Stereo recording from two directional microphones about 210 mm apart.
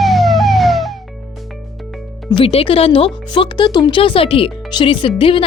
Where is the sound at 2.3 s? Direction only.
25° left (ahead or behind).